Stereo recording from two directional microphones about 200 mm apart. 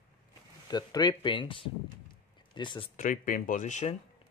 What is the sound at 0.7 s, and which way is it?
Speech, 20° left (ahead or behind).